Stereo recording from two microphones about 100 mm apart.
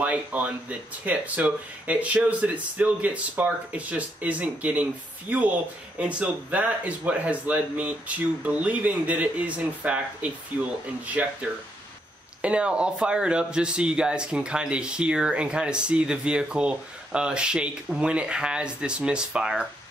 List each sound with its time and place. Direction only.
0.0 s speech: 15° right (ahead or behind)
12.4 s speech: 10° right (ahead or behind)